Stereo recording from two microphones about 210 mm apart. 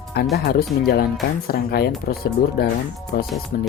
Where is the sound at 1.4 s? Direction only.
45° left (ahead or behind).